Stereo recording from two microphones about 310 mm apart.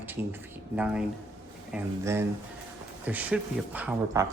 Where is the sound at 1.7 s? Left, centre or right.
Centre.